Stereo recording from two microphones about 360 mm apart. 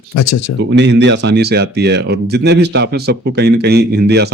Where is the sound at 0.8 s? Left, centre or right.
Right.